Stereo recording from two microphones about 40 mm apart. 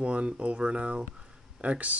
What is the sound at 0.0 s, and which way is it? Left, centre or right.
Speech, right.